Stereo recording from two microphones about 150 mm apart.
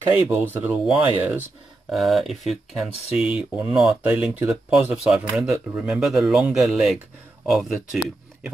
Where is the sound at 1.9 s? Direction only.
Centre (ahead or behind).